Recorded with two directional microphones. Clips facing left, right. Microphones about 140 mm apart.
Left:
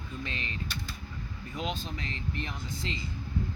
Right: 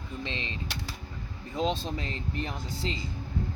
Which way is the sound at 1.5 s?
30° right (ahead or behind).